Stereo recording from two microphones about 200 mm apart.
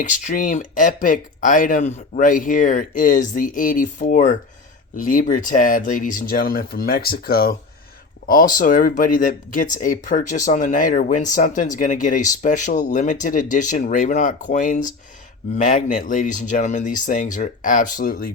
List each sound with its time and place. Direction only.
0.0 s speech: 40° left (ahead or behind)